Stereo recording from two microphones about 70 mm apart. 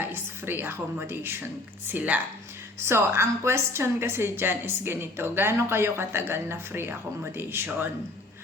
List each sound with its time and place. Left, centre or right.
0.0 s a woman's voice: right
2.8 s a woman's voice: right